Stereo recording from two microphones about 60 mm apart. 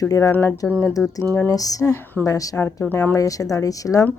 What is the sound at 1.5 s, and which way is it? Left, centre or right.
A woman's voice, left.